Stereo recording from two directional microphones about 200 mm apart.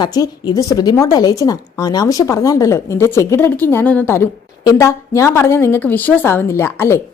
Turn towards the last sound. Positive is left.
turn(degrees=10)  # may be behind; listen again after turning